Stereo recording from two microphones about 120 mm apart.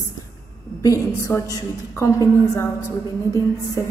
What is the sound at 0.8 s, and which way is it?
A woman's voice, 25° left (ahead or behind).